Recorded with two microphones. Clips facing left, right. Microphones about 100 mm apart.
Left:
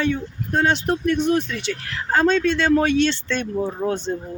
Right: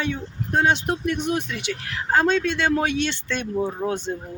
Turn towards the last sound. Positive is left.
turn(degrees=-15)  # may be behind; listen again after turning